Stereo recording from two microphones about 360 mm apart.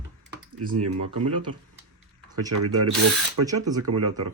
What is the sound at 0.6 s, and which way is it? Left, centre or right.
Speech, right.